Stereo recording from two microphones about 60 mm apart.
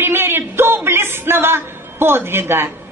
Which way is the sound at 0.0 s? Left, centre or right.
Right.